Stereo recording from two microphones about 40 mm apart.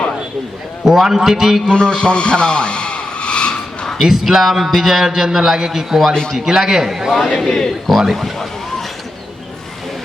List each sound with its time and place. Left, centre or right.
0.9 s a man's voice: centre
1.7 s a man's voice: left
4.0 s a man's voice: centre